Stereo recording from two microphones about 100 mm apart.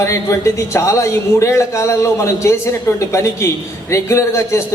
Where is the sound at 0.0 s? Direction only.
30° left (ahead or behind).